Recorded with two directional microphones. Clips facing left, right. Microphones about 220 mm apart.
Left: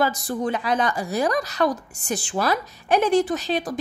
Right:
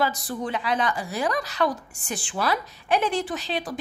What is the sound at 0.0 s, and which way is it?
A woman's voice, 45° left (ahead or behind).